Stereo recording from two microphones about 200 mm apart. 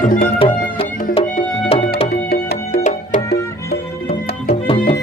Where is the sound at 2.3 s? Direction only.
50° left (ahead or behind).